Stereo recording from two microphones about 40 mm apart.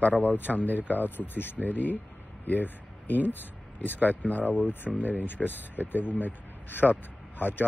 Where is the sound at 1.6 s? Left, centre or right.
Left.